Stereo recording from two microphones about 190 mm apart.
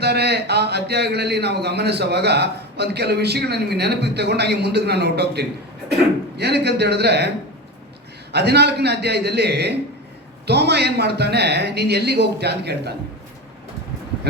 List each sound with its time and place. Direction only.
0.0 s speech: 60° right (ahead or behind)
8.3 s speech: 60° right (ahead or behind)